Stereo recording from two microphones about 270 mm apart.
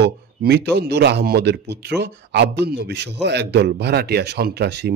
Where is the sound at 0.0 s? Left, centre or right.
Right.